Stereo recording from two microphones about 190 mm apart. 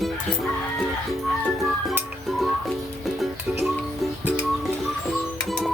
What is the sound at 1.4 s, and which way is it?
Music, centre (ahead or behind).